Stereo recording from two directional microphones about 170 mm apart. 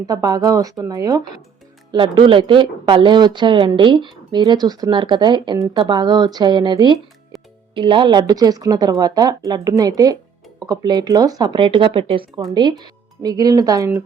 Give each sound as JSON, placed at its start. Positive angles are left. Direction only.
{"t": 0.1, "sound": "speech", "side_deg": -20}
{"t": 13.2, "sound": "speech", "side_deg": -20}